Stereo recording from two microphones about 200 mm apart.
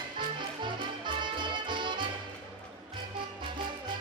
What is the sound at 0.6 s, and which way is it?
Music, 25° right (ahead or behind).